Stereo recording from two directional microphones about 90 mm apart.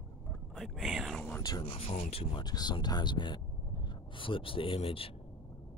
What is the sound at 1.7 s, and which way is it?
Speech, 90° left.